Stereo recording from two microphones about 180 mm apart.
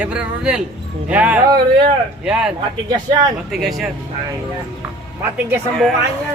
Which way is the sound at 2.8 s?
20° right (ahead or behind).